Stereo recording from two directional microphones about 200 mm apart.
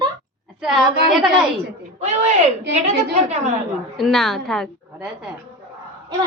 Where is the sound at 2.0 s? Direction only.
35° right (ahead or behind).